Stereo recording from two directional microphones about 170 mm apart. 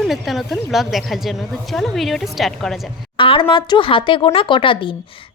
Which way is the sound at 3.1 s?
30° left (ahead or behind).